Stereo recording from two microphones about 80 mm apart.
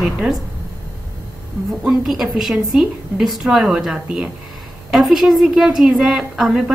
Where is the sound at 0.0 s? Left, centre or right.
Centre.